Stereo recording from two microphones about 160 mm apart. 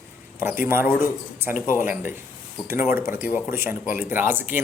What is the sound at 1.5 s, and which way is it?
Speech, 55° left (ahead or behind).